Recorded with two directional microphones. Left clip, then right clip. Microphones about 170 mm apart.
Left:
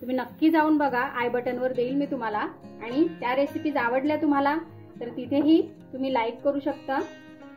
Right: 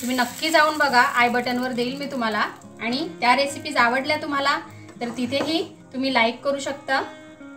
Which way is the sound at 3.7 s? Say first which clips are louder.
Right 6 dB; 45° left (ahead or behind).